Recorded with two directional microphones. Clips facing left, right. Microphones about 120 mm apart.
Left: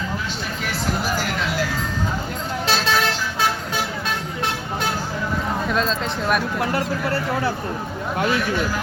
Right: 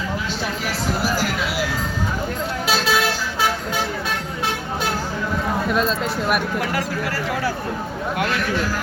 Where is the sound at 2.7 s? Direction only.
5° right (ahead or behind).